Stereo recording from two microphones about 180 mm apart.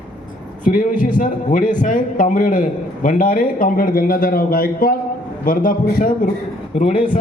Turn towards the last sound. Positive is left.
turn(degrees=45)  # may be behind; listen again after turning